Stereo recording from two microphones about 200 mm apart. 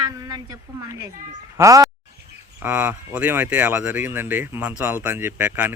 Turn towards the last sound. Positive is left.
turn(degrees=-10)  # may be behind; listen again after turning